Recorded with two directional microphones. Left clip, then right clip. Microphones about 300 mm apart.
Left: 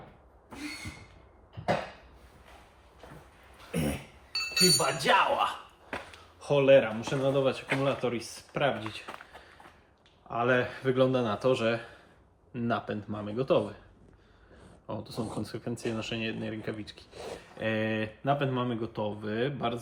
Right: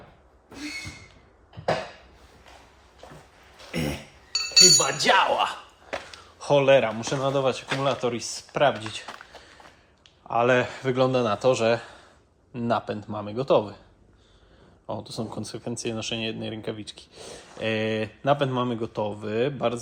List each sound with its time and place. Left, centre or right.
4.3 s speech: right
10.2 s speech: centre
14.8 s speech: centre